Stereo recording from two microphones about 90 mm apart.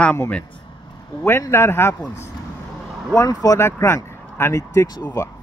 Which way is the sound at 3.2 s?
50° left (ahead or behind).